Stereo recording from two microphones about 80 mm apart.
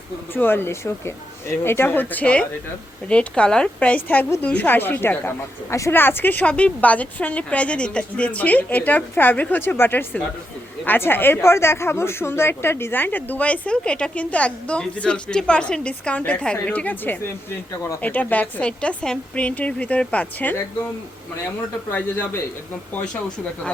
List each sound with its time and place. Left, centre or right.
0.3 s a woman's voice: left